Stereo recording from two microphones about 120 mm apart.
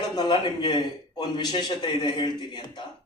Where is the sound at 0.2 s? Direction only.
40° left (ahead or behind).